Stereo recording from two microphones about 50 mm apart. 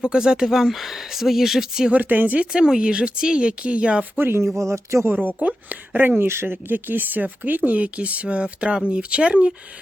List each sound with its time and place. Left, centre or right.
0.0 s speech: centre
1.9 s speech: right
2.5 s speech: centre
4.2 s speech: right
4.5 s speech: right
5.2 s speech: right
6.0 s speech: right